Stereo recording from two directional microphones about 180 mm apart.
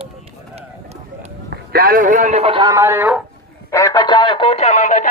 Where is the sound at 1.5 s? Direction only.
55° right (ahead or behind); by 2.7 s 30° right (ahead or behind).